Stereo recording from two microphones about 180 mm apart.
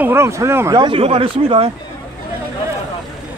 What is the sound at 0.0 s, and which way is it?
Speech, 15° right (ahead or behind).